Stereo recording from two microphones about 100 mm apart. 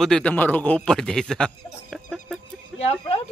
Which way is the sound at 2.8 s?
90° left.